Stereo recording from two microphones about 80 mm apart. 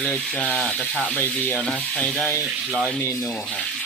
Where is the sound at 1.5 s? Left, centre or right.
Centre.